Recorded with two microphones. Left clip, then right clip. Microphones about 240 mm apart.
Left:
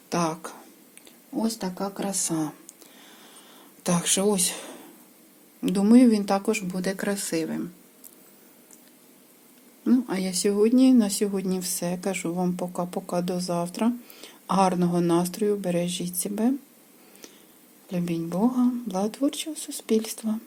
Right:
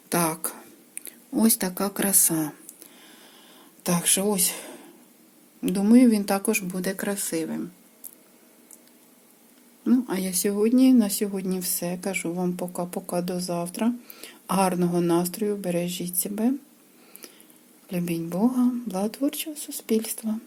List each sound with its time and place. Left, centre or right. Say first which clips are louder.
0.1 s a sound: right 1 dB; centre
1.3 s speech: right 5 dB; right; by 2.6 s centre
3.2 s a sound: left 1 dB; centre
5.6 s speech: even; centre
9.8 s speech: even; centre
17.8 s speech: even; centre